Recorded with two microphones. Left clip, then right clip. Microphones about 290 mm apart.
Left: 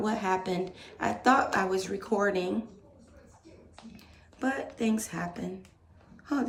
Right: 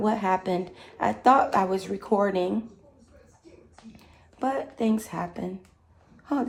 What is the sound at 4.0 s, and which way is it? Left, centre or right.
Speech, centre.